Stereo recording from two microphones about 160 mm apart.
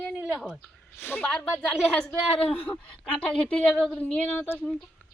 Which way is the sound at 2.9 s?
5° left (ahead or behind).